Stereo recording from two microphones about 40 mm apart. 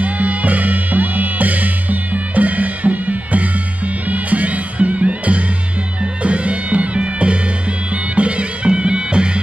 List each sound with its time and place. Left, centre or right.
0.0 s music: right